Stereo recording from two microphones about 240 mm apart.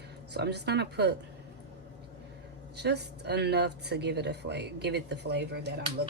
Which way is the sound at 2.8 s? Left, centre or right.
Right.